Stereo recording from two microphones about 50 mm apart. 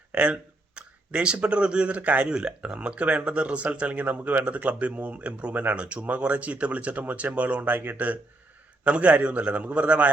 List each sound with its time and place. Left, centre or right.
0.1 s speech: right